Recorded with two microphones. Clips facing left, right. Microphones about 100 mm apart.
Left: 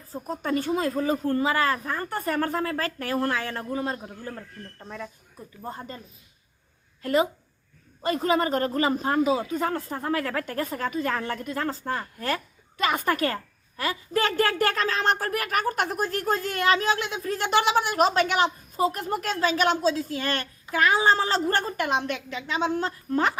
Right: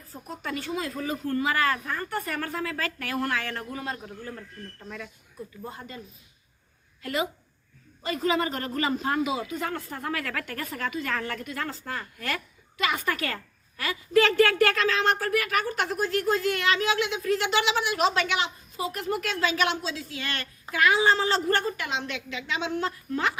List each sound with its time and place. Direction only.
0.1 s speech: 35° left (ahead or behind)
7.0 s speech: 40° left (ahead or behind)